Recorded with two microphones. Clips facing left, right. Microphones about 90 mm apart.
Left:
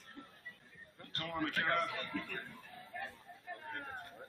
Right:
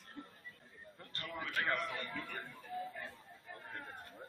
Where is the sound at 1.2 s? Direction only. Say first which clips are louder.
Left 2 dB; 50° left (ahead or behind).